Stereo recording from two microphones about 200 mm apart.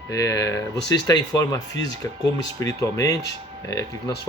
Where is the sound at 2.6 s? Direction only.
15° left (ahead or behind).